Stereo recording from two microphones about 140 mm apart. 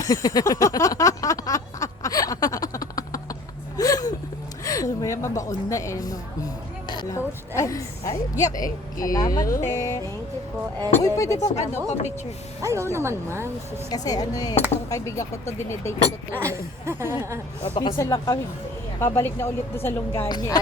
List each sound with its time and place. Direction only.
0.0 s a sound: 25° left (ahead or behind)
5.6 s speech: 20° left (ahead or behind)
11.4 s speech: 50° left (ahead or behind)
12.6 s speech: 20° right (ahead or behind)
13.9 s speech: 25° left (ahead or behind)
16.4 s speech: 20° right (ahead or behind)
17.6 s speech: 40° left (ahead or behind)
17.9 s speech: 20° left (ahead or behind)
20.2 s speech: 30° left (ahead or behind)